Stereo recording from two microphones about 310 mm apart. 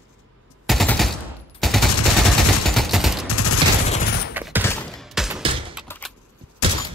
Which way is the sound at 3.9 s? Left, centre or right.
Left.